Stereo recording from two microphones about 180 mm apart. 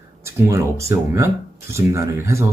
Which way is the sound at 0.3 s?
15° right (ahead or behind).